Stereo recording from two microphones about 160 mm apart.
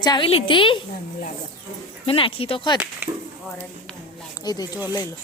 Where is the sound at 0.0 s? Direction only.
30° left (ahead or behind).